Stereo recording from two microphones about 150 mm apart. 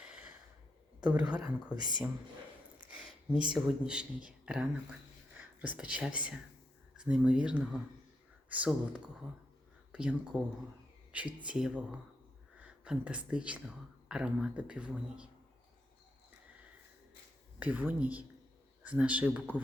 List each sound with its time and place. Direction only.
0.0 s a sound: 5° right (ahead or behind)
1.0 s speech: 10° right (ahead or behind)
1.4 s speech: 25° right (ahead or behind)
3.5 s speech: 5° right (ahead or behind)
17.6 s speech: 10° right (ahead or behind)